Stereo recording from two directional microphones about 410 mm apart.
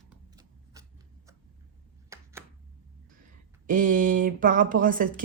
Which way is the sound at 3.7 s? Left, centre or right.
Centre.